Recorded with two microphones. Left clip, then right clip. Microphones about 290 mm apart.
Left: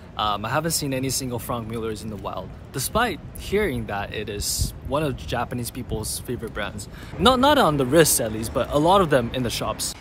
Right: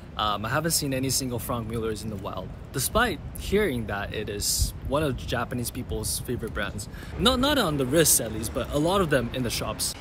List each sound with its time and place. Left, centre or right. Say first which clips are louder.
0.2 s speech: left 3 dB; centre